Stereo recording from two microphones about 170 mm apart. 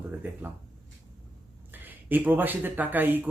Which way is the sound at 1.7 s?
10° right (ahead or behind).